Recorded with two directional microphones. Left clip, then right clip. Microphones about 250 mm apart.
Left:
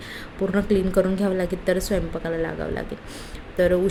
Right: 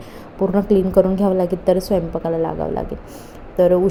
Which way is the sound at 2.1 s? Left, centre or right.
Centre.